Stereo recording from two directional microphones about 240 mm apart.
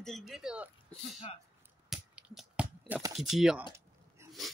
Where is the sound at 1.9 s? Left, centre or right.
Centre.